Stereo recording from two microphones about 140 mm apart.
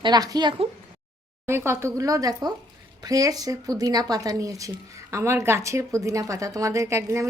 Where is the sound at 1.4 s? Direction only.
20° right (ahead or behind).